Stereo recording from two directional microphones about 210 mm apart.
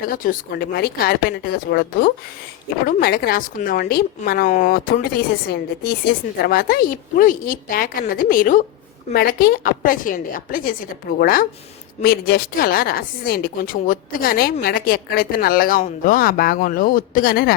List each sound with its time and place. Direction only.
0.1 s a woman's voice: 40° left (ahead or behind)